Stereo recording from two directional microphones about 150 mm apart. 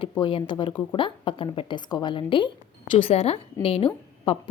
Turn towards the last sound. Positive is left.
turn(degrees=40)  # may be behind; listen again after turning